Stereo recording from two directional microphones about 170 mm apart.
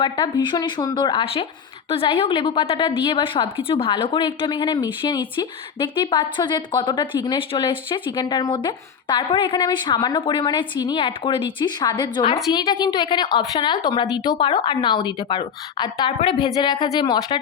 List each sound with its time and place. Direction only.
0.0 s speech: 25° left (ahead or behind)